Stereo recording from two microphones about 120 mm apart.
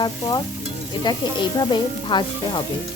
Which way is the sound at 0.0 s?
35° left (ahead or behind).